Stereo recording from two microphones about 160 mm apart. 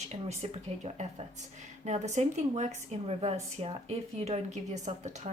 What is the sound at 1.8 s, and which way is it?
Speech, 45° right (ahead or behind).